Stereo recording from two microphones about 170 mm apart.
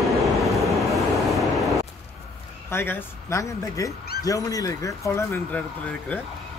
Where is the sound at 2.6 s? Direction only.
15° left (ahead or behind).